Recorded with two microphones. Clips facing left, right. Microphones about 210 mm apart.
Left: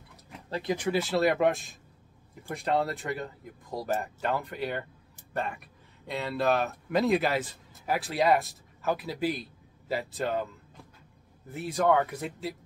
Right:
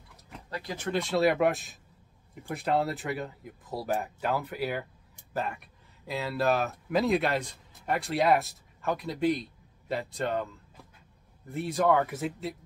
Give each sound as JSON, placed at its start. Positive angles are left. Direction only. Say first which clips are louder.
{"t": 0.5, "sound": "speech", "louder": "left 7 dB", "side_deg": 20}
{"t": 0.8, "sound": "speech", "louder": "right 1 dB", "side_deg": 5}